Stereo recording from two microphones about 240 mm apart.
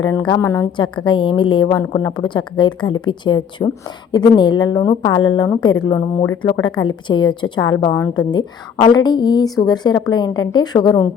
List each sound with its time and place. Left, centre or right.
0.0 s a woman's voice: centre